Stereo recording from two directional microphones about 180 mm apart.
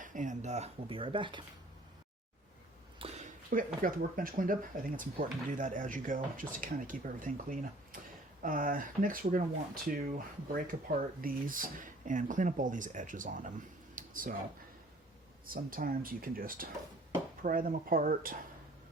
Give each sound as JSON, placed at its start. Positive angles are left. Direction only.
{"t": 0.0, "sound": "speech", "side_deg": -45}
{"t": 3.0, "sound": "speech", "side_deg": -40}
{"t": 10.5, "sound": "speech", "side_deg": -55}
{"t": 13.9, "sound": "a sound", "side_deg": -50}
{"t": 15.4, "sound": "speech", "side_deg": -55}